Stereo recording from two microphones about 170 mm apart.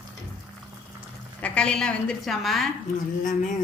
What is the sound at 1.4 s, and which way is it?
Speech, 5° left (ahead or behind).